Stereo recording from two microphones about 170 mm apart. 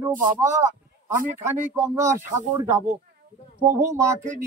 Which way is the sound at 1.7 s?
15° right (ahead or behind).